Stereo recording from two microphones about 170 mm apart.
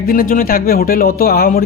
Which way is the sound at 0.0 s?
55° left (ahead or behind).